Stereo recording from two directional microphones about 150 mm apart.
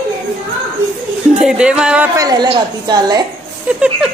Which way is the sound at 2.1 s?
25° right (ahead or behind).